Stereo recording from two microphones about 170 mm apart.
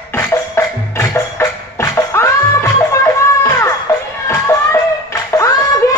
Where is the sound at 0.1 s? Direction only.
20° left (ahead or behind).